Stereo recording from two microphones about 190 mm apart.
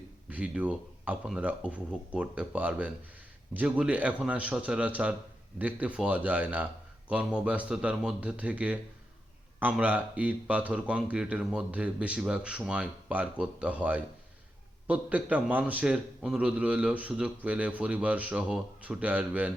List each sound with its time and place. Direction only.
0.3 s a man's voice: 10° right (ahead or behind)